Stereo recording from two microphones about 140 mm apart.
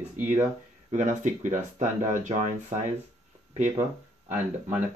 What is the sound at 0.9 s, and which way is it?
Speech, 60° right (ahead or behind).